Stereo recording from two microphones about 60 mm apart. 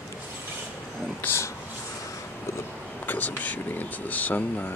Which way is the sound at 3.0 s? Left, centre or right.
Left.